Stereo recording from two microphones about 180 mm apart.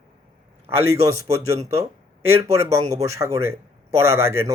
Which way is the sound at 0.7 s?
15° right (ahead or behind).